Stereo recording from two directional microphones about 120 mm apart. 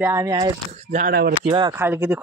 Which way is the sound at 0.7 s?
75° right (ahead or behind).